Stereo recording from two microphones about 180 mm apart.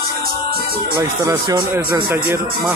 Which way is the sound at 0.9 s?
20° right (ahead or behind).